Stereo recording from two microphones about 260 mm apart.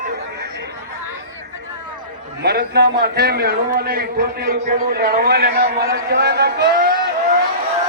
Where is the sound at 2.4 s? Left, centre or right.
Right.